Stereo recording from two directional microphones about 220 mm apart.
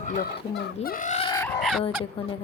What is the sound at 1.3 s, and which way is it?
Chicken, 15° left (ahead or behind).